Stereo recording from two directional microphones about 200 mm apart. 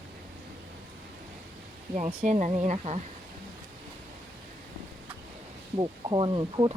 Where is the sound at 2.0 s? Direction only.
35° right (ahead or behind).